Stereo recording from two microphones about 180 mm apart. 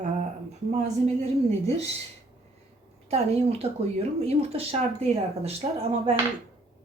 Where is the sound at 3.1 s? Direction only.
35° right (ahead or behind).